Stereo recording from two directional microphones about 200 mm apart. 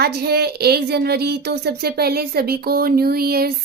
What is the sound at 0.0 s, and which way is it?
Speech, 55° right (ahead or behind).